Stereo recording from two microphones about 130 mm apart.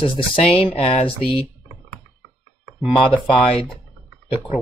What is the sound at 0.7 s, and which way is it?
Speech, 45° left (ahead or behind).